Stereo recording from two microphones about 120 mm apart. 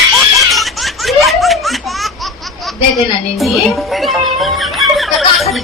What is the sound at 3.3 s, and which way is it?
Music, centre (ahead or behind).